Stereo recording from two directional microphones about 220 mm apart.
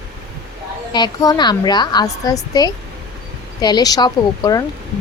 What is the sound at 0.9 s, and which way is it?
A woman's voice, 15° left (ahead or behind).